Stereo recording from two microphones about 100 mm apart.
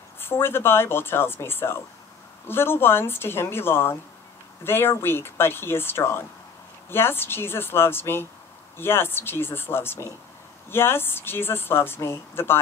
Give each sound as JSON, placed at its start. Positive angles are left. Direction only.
{"t": 0.2, "sound": "speech", "side_deg": 25}